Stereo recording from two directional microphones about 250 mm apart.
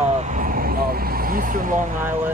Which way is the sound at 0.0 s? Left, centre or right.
Right.